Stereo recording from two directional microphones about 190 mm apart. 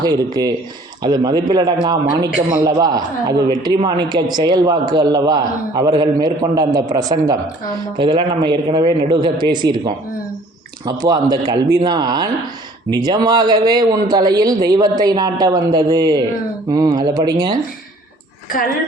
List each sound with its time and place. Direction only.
0.0 s a man's voice: 20° right (ahead or behind)